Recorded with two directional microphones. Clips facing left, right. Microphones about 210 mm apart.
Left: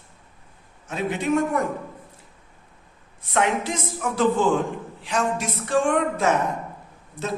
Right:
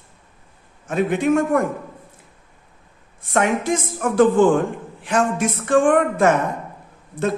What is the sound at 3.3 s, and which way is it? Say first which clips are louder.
A man's voice: right 4 dB; 50° right (ahead or behind).